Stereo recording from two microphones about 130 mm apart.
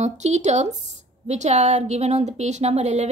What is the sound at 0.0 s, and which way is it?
A woman's voice, 60° right (ahead or behind).